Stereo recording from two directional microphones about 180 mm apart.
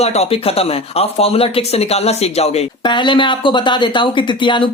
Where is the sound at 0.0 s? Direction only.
35° left (ahead or behind).